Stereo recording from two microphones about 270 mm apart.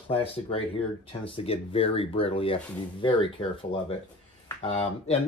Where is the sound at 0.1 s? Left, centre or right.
Left.